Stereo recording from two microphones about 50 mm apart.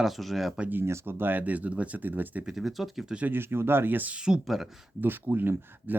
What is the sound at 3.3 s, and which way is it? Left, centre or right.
Speech, right.